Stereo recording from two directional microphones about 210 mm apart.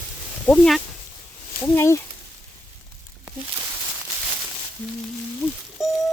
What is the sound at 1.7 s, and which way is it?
Speech, 15° left (ahead or behind).